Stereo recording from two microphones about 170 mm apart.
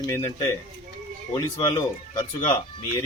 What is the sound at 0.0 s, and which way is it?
Speech, 20° left (ahead or behind).